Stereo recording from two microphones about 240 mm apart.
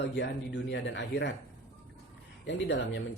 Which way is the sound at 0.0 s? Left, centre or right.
Left.